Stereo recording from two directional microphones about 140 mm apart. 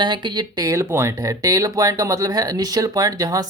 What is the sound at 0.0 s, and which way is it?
Speech, 35° right (ahead or behind).